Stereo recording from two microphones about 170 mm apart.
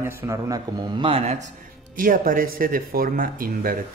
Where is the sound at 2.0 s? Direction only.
55° right (ahead or behind).